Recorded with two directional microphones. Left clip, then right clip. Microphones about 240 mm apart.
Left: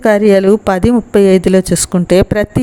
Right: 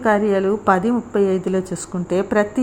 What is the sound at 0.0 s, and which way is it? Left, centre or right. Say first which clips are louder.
A woman's voice: left 8 dB; left.